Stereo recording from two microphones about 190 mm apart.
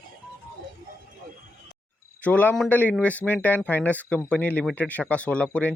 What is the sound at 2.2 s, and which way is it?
Speech, 10° left (ahead or behind).